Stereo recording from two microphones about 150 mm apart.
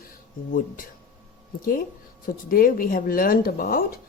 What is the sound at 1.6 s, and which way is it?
Speech, 65° left (ahead or behind).